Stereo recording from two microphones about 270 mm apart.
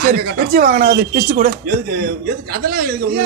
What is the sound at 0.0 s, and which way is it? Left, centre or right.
A man's voice, right.